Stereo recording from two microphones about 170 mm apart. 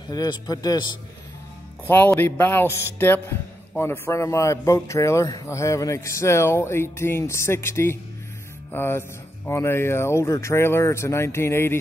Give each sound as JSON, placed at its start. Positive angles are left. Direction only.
{"t": 0.1, "sound": "speech", "side_deg": 20}
{"t": 1.9, "sound": "a man's voice", "side_deg": 10}